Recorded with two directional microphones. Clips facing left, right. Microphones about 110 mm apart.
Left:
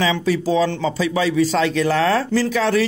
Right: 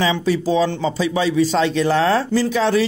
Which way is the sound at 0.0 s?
25° right (ahead or behind).